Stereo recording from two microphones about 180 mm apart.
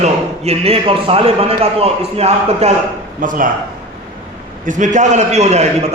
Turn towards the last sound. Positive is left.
turn(degrees=-35)  # may be behind; listen again after turning